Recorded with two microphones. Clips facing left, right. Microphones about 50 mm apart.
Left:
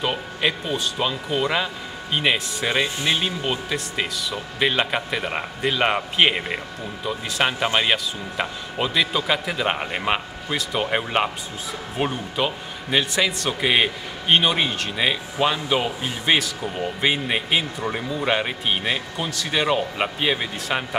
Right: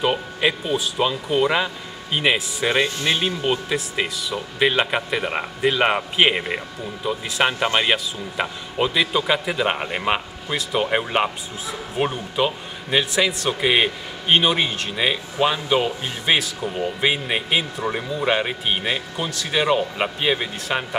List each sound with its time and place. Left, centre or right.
0.0 s a man's voice: centre